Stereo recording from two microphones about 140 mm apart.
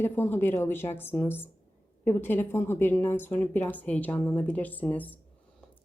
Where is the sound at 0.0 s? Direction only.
15° left (ahead or behind).